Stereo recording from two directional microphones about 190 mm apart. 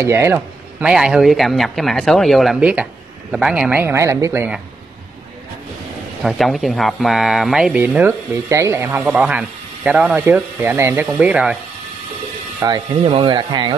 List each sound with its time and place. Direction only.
0.0 s speech: 15° right (ahead or behind)
6.2 s speech: centre (ahead or behind)
12.5 s speech: 20° right (ahead or behind)